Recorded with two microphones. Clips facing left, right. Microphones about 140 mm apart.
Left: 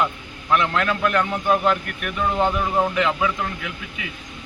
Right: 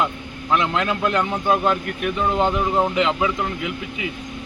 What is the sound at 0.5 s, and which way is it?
A man's voice, 20° right (ahead or behind).